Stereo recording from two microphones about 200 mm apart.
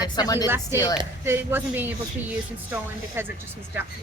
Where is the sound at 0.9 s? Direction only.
10° right (ahead or behind).